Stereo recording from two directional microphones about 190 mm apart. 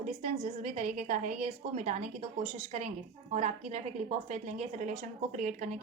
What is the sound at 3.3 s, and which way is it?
A woman's voice, 35° right (ahead or behind).